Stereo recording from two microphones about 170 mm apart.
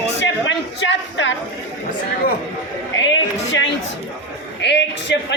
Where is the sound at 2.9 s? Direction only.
90° left.